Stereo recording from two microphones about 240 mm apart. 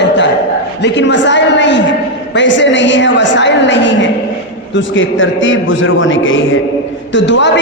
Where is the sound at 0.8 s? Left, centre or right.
Left.